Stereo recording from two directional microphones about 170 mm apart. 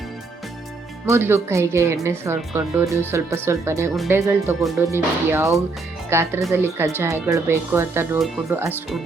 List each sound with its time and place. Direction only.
1.0 s speech: 15° right (ahead or behind)